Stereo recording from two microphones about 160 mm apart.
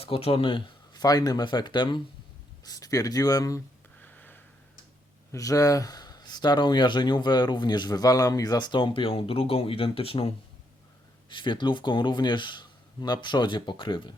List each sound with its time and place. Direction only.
0.0 s speech: 40° left (ahead or behind); by 3.6 s 20° left (ahead or behind)
4.0 s sniff: 10° left (ahead or behind)
5.3 s speech: 20° left (ahead or behind)